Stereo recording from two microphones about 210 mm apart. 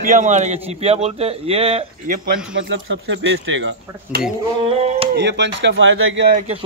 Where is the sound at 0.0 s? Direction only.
35° right (ahead or behind).